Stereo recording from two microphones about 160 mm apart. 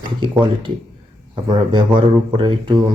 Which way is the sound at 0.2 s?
30° right (ahead or behind).